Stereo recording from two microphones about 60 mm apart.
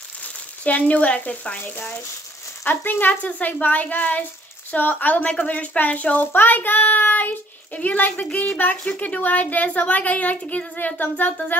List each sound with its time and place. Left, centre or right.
0.7 s a child's voice: left
1.6 s a child's voice: left
11.0 s speech: left